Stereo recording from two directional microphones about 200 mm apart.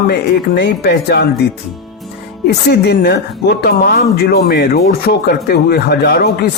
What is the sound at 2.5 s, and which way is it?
Speech, 55° left (ahead or behind).